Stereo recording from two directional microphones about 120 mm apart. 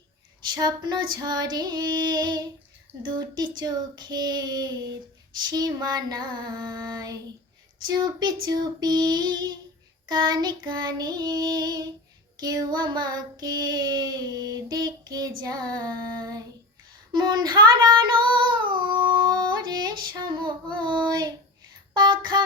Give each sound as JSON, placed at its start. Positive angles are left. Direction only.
{"t": 0.5, "sound": "child singing", "side_deg": -35}
{"t": 18.0, "sound": "female singing", "side_deg": -40}
{"t": 21.9, "sound": "child singing", "side_deg": -40}